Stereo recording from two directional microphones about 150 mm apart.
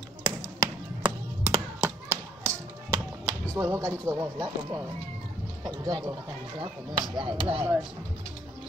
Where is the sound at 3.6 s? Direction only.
20° right (ahead or behind).